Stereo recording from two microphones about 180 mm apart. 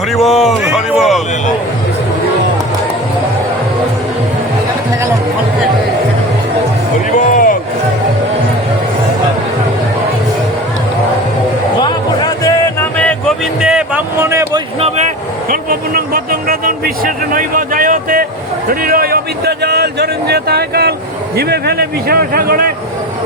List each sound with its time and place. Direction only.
0.1 s speech: centre (ahead or behind)
7.3 s a sound: 50° left (ahead or behind)
11.8 s music: 25° left (ahead or behind); by 13.3 s 5° left (ahead or behind)
13.6 s vehicle: 5° right (ahead or behind)
14.8 s vehicle: 35° right (ahead or behind)
18.7 s a sound: 55° right (ahead or behind)
21.3 s a man's voice: 60° right (ahead or behind)